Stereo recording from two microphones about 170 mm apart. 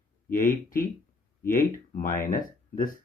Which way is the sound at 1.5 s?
55° left (ahead or behind).